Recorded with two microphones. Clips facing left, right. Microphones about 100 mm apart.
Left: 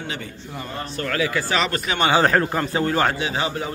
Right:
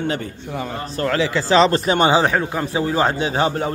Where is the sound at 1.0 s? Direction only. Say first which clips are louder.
Right 5 dB; 25° right (ahead or behind).